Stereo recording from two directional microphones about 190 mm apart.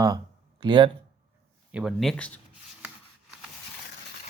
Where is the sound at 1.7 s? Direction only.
Centre (ahead or behind).